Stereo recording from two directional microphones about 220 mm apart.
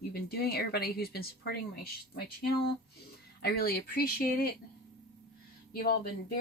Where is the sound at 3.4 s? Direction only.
45° left (ahead or behind).